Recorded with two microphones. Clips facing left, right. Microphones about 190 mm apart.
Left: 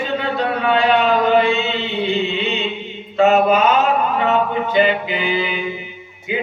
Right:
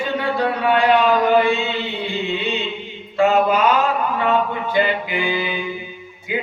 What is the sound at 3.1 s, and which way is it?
Mantra, 20° left (ahead or behind).